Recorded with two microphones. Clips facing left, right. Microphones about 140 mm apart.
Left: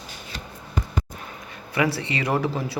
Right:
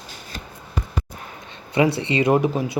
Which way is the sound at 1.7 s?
20° right (ahead or behind).